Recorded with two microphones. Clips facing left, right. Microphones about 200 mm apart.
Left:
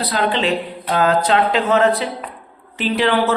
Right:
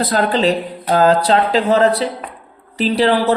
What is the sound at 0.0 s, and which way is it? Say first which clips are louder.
Speech: right 4 dB; 40° right (ahead or behind).